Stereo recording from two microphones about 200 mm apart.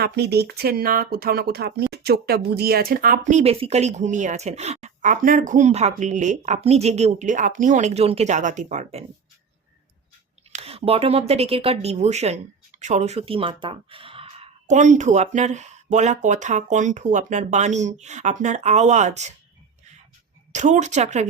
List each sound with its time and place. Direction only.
0.0 s speech: 55° right (ahead or behind); by 9.0 s 35° right (ahead or behind)
10.5 s speech: 30° right (ahead or behind)
20.5 s speech: 35° right (ahead or behind)